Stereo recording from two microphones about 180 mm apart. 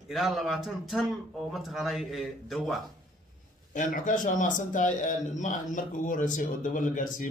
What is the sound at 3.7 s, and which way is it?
Speech, 45° left (ahead or behind).